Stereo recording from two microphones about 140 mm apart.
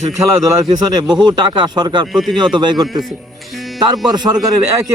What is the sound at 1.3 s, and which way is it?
Speech, 30° right (ahead or behind).